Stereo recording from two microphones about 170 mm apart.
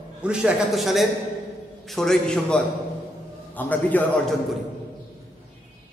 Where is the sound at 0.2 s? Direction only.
5° right (ahead or behind).